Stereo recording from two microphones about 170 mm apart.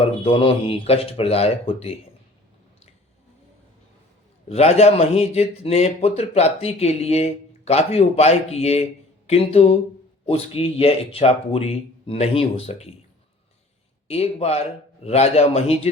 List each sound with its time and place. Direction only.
0.0 s a man's voice: 30° left (ahead or behind)
4.4 s a man's voice: 40° left (ahead or behind)
14.1 s a man's voice: 35° left (ahead or behind)